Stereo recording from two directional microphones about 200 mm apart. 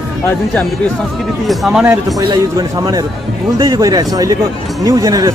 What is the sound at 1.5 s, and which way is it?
Speech, centre (ahead or behind).